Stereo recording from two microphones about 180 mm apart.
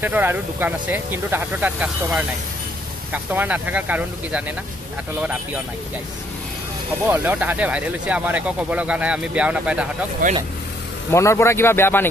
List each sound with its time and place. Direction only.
0.0 s speech: 10° right (ahead or behind)
7.1 s speech: 10° right (ahead or behind)
10.2 s speech: 50° right (ahead or behind)
11.1 s a man's voice: 15° left (ahead or behind)